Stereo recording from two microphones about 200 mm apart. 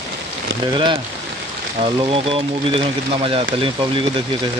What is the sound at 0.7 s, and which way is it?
Speech, 25° right (ahead or behind).